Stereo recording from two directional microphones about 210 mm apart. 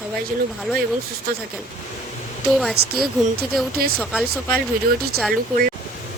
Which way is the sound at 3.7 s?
45° right (ahead or behind).